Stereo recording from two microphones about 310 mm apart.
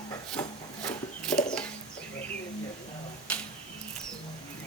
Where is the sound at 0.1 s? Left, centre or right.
Centre.